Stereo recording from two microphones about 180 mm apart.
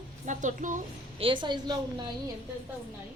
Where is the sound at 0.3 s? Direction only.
45° right (ahead or behind).